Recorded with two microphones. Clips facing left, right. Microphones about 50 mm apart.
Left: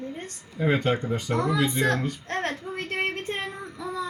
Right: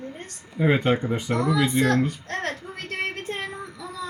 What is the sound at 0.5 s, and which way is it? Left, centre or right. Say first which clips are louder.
Speech: right 3 dB; centre.